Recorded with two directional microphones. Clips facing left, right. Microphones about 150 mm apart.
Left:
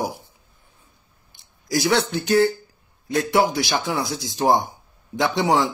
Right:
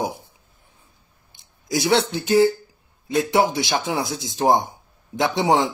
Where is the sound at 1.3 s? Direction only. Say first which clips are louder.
Left 1 dB; 20° right (ahead or behind).